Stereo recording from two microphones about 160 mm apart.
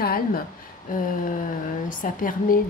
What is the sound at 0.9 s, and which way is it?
Speech, 60° left (ahead or behind).